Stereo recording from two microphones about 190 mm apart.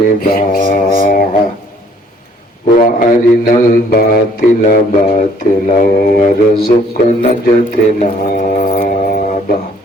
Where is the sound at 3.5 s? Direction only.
45° left (ahead or behind).